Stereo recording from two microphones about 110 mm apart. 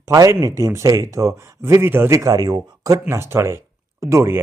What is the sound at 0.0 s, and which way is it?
Speech, 30° right (ahead or behind).